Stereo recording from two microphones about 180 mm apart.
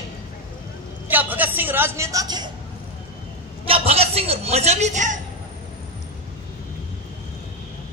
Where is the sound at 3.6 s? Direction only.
35° right (ahead or behind).